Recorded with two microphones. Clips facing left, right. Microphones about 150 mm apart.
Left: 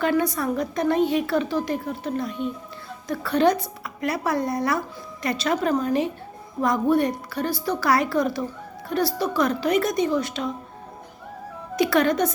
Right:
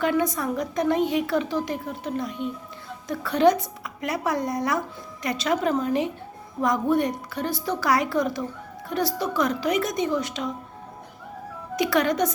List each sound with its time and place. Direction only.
0.0 s a woman's voice: 20° right (ahead or behind)
11.8 s a woman's voice: 15° right (ahead or behind)